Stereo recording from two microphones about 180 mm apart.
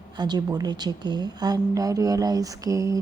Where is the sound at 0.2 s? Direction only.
25° right (ahead or behind).